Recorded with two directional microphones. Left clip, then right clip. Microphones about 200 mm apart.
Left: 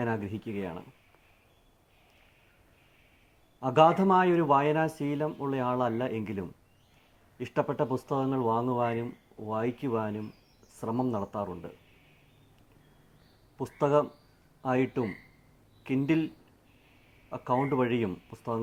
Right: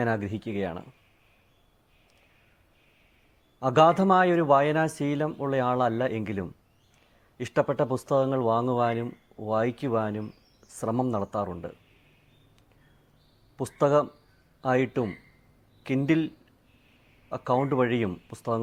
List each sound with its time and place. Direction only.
0.0 s speech: 50° right (ahead or behind)
3.6 s speech: 50° right (ahead or behind)
13.6 s speech: 50° right (ahead or behind)